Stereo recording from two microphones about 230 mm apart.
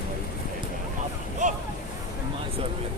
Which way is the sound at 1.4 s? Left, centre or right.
Right.